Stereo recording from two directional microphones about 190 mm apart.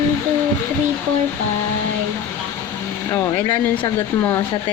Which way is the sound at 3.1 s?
20° left (ahead or behind).